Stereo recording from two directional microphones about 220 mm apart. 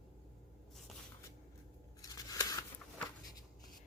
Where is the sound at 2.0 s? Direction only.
15° left (ahead or behind).